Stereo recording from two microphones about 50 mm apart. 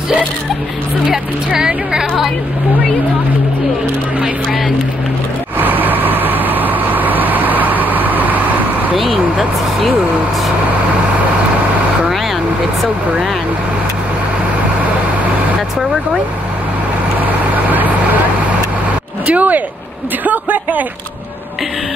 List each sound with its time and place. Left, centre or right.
1.6 s speech: centre
5.6 s vehicle: right
17.6 s vehicle: right
19.2 s speech: right
20.2 s a sound: right